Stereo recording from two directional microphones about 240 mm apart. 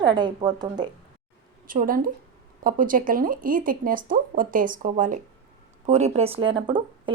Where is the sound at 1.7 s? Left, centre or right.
Right.